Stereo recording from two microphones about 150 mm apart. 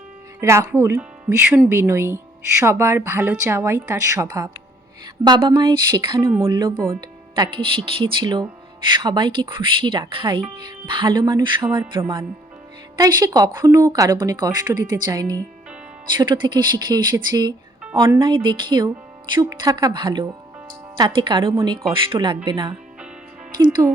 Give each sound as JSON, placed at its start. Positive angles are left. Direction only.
{"t": 0.3, "sound": "speech", "side_deg": -20}
{"t": 13.0, "sound": "speech", "side_deg": -25}